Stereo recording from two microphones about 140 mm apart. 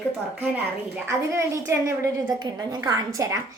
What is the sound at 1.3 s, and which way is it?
A child's voice, 20° right (ahead or behind).